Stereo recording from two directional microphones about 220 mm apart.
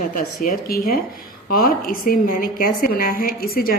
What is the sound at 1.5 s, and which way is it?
A woman's voice, 40° left (ahead or behind).